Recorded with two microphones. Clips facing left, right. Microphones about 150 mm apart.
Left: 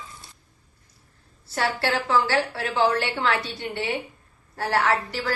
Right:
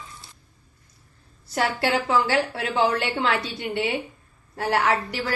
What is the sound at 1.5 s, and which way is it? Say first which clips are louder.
A woman's voice: right 2 dB; 15° right (ahead or behind).